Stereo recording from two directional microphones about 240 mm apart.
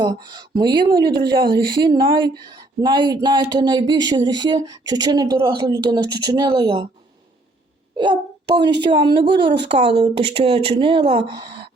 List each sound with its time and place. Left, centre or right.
0.0 s speech: centre
7.9 s a child's voice: centre